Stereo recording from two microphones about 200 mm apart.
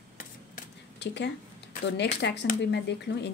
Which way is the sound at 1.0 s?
60° left (ahead or behind).